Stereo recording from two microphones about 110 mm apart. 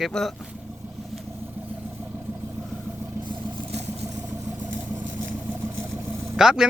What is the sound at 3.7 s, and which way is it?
Vehicle, 70° right (ahead or behind).